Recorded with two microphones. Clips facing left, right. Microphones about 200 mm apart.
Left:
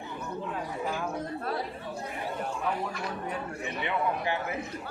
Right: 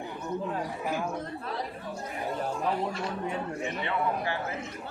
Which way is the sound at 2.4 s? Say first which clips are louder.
Right 3 dB; 30° right (ahead or behind).